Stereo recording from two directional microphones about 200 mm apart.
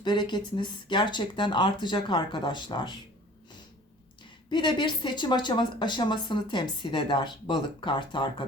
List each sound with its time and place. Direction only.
0.0 s speech: 20° left (ahead or behind)
4.5 s speech: 20° left (ahead or behind)